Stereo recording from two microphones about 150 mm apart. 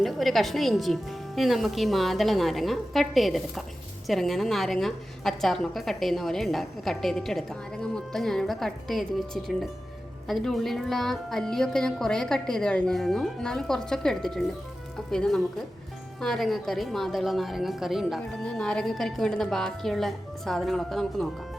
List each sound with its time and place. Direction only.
0.0 s a woman's voice: centre (ahead or behind)